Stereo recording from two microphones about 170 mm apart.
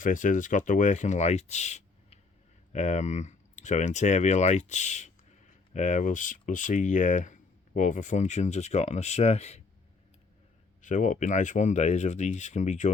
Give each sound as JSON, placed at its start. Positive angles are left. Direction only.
{"t": 0.0, "sound": "speech", "side_deg": 50}
{"t": 10.8, "sound": "speech", "side_deg": 45}